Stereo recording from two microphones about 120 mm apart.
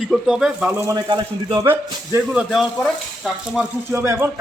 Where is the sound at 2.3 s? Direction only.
5° right (ahead or behind).